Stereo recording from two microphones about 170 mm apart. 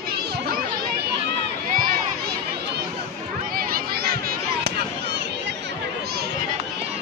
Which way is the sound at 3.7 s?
65° right (ahead or behind).